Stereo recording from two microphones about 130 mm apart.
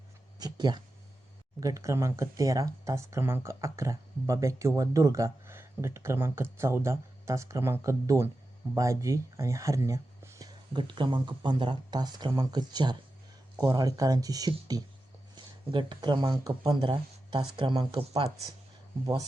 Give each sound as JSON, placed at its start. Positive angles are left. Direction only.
{"t": 0.3, "sound": "a sound", "side_deg": -30}
{"t": 1.6, "sound": "speech", "side_deg": -25}
{"t": 10.8, "sound": "speech", "side_deg": -40}